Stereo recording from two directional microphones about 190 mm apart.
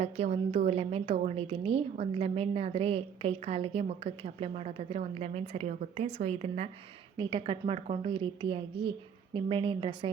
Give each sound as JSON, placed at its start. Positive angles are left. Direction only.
{"t": 0.0, "sound": "a woman's voice", "side_deg": -35}